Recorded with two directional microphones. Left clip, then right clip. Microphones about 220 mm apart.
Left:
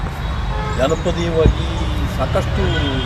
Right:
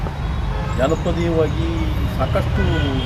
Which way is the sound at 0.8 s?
20° left (ahead or behind).